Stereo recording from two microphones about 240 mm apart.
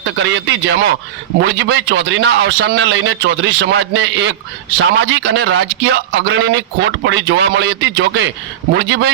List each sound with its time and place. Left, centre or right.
0.0 s a man's voice: right